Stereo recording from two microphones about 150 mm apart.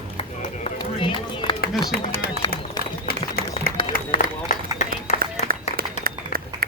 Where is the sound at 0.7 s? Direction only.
35° left (ahead or behind).